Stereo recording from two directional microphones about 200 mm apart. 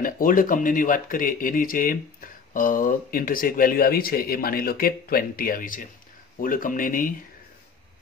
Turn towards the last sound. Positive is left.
turn(degrees=45)  # may be behind; listen again after turning